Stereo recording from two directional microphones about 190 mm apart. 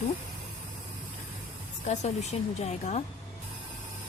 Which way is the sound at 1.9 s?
35° left (ahead or behind).